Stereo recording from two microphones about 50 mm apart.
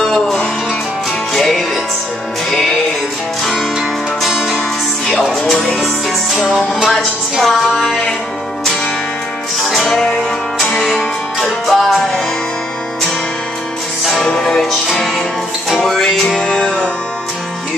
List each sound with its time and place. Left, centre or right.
0.1 s music: centre
4.2 s music: centre
5.7 s music: centre
7.0 s music: centre
9.7 s music: centre
11.3 s music: centre
14.0 s music: centre
16.3 s music: centre